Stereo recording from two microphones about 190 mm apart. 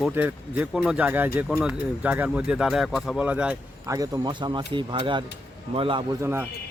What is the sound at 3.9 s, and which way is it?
A man's voice, 20° right (ahead or behind).